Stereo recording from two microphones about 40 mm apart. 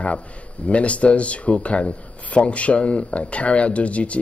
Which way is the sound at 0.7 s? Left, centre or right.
Left.